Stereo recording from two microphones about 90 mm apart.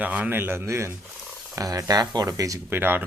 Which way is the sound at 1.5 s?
40° right (ahead or behind).